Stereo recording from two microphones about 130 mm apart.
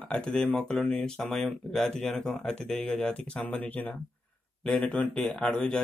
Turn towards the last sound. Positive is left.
turn(degrees=5)  # may be behind; listen again after turning